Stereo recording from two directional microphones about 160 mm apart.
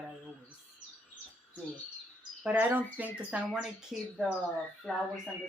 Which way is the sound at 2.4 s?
10° right (ahead or behind).